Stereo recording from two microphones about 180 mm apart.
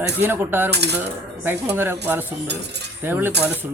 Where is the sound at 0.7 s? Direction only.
70° right (ahead or behind).